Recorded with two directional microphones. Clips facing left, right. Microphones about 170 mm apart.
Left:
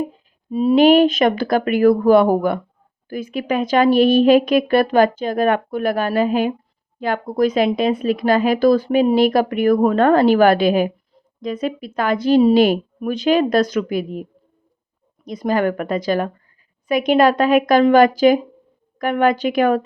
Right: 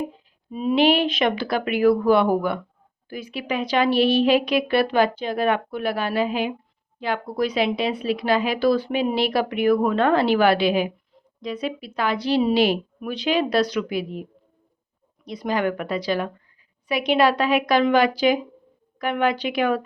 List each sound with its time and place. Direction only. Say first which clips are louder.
0.1 s speech: left 9 dB; 40° left (ahead or behind)